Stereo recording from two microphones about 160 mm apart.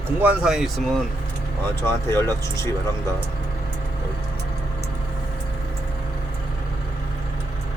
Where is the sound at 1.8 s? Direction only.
15° left (ahead or behind).